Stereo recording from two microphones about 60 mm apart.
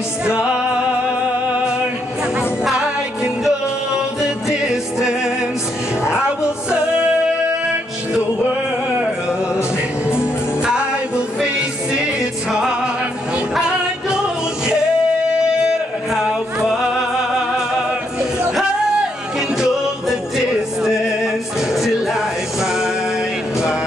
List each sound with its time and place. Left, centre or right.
0.2 s music: centre
3.4 s music: centre
9.6 s music: left
12.4 s music: centre
16.1 s music: centre
18.5 s music: centre